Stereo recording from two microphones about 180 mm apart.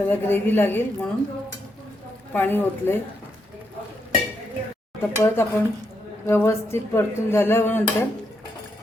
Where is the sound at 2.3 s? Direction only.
10° left (ahead or behind).